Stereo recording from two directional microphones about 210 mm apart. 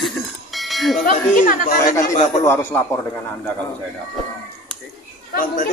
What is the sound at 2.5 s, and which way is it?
A man's voice, 10° left (ahead or behind).